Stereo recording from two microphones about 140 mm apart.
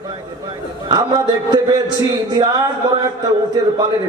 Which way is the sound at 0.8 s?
30° right (ahead or behind).